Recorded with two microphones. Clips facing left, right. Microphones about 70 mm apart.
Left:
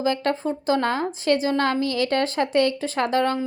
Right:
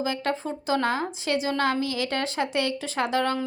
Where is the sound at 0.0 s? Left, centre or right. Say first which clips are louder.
Left 4 dB; left.